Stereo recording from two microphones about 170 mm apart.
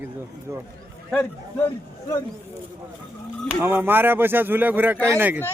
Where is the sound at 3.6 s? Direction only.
10° right (ahead or behind).